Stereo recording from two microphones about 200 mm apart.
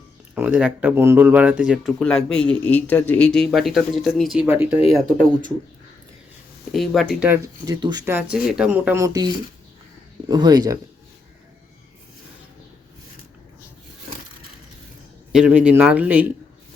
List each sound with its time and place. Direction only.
0.3 s speech: 5° right (ahead or behind)
4.9 s speech: 5° left (ahead or behind)
6.7 s speech: centre (ahead or behind); by 8.1 s 20° right (ahead or behind)
8.1 s speech: 5° right (ahead or behind)
15.3 s speech: 5° right (ahead or behind)